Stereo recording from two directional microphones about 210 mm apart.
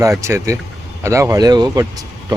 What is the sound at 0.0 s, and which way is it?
Speech, 15° right (ahead or behind).